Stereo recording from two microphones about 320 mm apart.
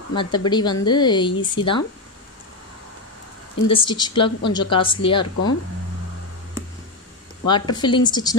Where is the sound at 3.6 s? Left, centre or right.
Centre.